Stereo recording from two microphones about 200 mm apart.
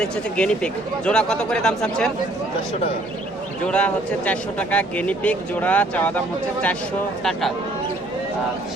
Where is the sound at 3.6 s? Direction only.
5° left (ahead or behind).